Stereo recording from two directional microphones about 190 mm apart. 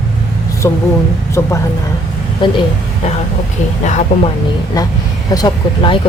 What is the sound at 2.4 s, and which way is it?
Speech, 25° left (ahead or behind).